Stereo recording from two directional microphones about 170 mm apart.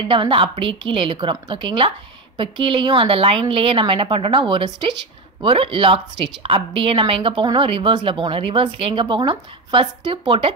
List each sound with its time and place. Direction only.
0.1 s a woman's voice: 30° right (ahead or behind)